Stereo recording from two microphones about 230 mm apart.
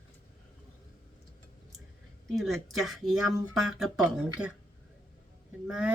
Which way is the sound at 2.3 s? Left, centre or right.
Centre.